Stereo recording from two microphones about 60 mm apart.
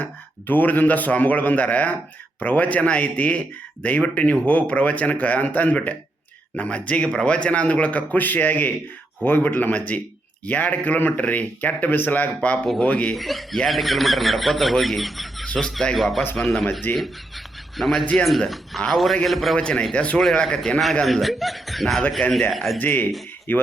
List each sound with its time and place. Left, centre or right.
0.0 s speech: left
13.1 s speech: centre
19.5 s speech: centre
21.1 s speech: centre
22.8 s speech: left